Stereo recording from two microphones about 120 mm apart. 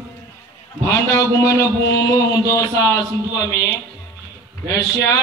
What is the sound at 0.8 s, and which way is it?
A man's voice, 25° left (ahead or behind).